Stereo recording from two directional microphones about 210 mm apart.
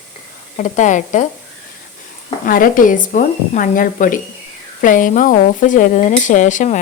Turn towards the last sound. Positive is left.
turn(degrees=35)  # may be behind; listen again after turning